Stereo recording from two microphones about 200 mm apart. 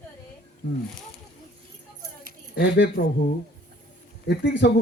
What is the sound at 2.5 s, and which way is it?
Speech, 65° left (ahead or behind).